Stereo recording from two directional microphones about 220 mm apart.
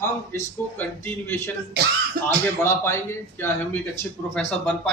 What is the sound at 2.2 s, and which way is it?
Speech, 40° right (ahead or behind).